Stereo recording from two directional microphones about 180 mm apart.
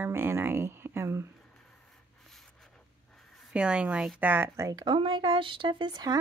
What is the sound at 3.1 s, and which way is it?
Speech, 5° right (ahead or behind).